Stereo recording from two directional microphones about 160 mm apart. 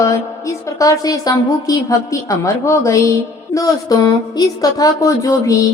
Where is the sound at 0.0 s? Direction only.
20° left (ahead or behind).